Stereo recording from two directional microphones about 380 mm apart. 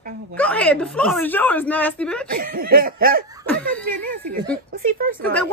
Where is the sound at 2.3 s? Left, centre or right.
Right.